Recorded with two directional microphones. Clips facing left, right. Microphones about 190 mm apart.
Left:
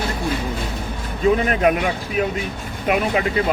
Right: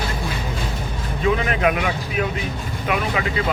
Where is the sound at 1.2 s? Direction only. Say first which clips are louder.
Left 3 dB; 40° left (ahead or behind).